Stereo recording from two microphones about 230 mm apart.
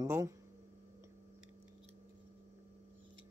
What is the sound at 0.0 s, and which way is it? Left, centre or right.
Speech, centre.